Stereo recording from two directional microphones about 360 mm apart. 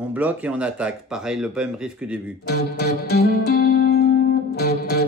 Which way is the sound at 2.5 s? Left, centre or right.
Left.